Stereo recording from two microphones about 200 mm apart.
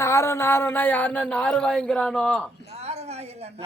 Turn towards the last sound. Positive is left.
turn(degrees=-30)  # may be behind; listen again after turning